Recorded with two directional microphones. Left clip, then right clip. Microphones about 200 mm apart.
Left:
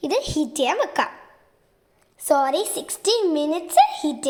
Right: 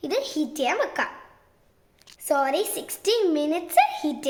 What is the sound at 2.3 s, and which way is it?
A child's voice, 15° left (ahead or behind).